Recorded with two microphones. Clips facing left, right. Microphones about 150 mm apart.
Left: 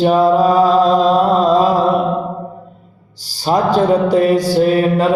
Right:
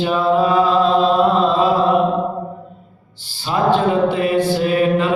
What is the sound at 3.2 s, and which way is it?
Mantra, 40° left (ahead or behind).